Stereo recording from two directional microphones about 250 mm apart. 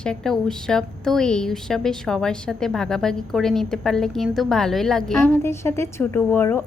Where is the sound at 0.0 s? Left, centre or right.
Centre.